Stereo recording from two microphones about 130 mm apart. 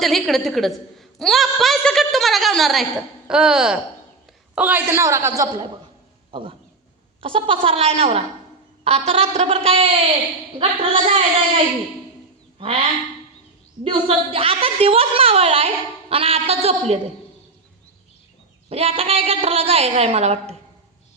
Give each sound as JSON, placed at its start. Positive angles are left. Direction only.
{"t": 0.0, "sound": "a woman's voice", "side_deg": 0}
{"t": 6.3, "sound": "a woman's voice", "side_deg": -40}
{"t": 13.8, "sound": "a woman's voice", "side_deg": -45}
{"t": 18.7, "sound": "a woman's voice", "side_deg": -50}